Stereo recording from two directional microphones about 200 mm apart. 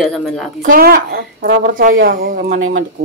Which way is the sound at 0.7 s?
50° right (ahead or behind).